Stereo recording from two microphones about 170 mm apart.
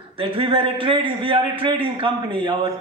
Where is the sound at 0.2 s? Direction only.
30° right (ahead or behind).